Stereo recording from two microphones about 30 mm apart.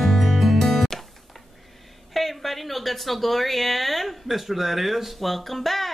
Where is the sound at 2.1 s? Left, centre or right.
Centre.